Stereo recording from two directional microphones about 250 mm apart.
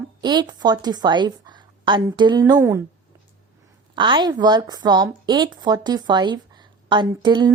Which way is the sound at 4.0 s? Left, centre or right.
Centre.